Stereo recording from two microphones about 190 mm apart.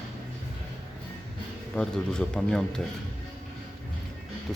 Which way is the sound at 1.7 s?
5° left (ahead or behind).